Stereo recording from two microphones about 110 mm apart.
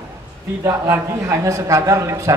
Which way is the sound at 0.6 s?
25° right (ahead or behind).